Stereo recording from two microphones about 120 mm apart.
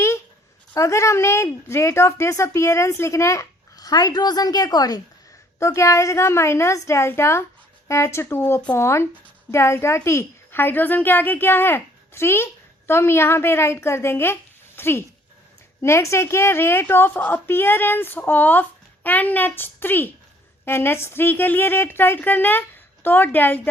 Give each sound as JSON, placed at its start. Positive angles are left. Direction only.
{"t": 0.7, "sound": "a woman's voice", "side_deg": 25}